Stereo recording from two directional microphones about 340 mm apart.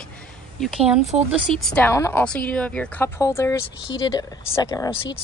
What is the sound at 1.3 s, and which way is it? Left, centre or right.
A woman's voice, centre.